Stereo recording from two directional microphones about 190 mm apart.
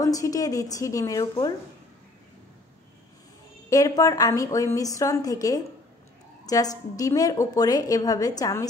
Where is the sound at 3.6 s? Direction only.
15° left (ahead or behind).